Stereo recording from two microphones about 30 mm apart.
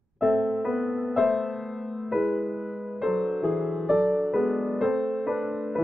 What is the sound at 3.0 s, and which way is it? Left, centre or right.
Music, centre.